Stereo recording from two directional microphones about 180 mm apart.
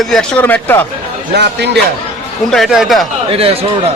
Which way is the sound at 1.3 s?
65° right (ahead or behind).